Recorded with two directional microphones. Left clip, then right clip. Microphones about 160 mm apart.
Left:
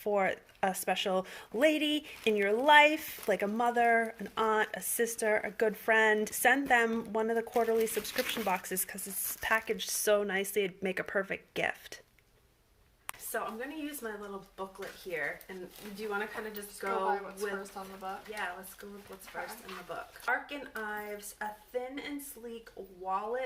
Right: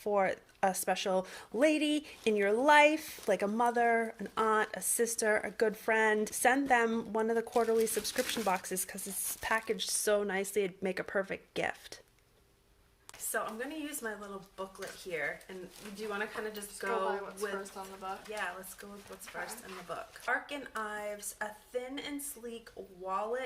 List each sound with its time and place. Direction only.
0.0 s speech: centre (ahead or behind)
13.3 s speech: 20° right (ahead or behind)
16.0 s speech: 20° right (ahead or behind)
17.1 s speech: 15° left (ahead or behind)
19.9 s speech: 25° right (ahead or behind)